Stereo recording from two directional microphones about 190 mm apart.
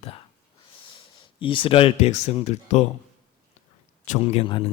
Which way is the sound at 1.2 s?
25° left (ahead or behind).